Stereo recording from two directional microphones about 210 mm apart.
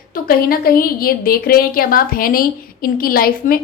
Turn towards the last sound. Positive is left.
turn(degrees=45)  # may be behind; listen again after turning